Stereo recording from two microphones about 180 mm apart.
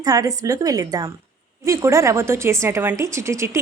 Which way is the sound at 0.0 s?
20° right (ahead or behind).